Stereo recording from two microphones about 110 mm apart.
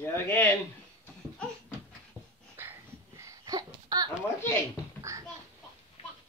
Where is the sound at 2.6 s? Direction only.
20° right (ahead or behind).